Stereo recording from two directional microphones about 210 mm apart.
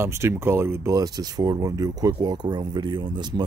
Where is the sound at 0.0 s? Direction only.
10° right (ahead or behind).